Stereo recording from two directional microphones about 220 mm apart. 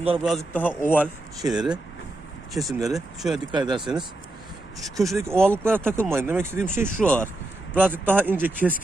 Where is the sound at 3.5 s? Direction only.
20° right (ahead or behind).